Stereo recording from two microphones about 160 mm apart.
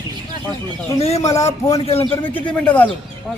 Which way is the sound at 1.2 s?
20° left (ahead or behind).